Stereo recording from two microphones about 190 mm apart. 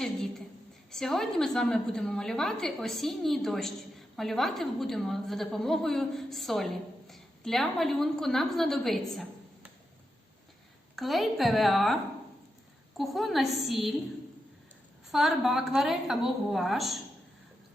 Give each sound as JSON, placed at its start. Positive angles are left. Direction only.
{"t": 0.0, "sound": "a sound", "side_deg": 0}
{"t": 0.9, "sound": "a woman's voice", "side_deg": 0}
{"t": 10.9, "sound": "a woman's voice", "side_deg": 0}
{"t": 13.0, "sound": "a woman's voice", "side_deg": 0}
{"t": 15.1, "sound": "a woman's voice", "side_deg": 0}